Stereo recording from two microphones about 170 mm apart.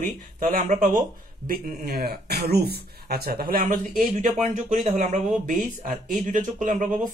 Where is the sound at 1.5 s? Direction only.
65° right (ahead or behind).